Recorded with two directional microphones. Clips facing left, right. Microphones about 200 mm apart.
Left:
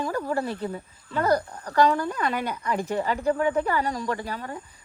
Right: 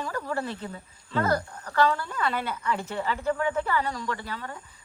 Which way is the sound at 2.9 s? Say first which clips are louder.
Left 4 dB; 40° left (ahead or behind).